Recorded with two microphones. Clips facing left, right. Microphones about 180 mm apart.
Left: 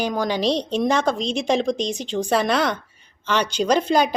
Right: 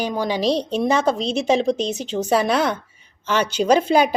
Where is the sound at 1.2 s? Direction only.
35° right (ahead or behind).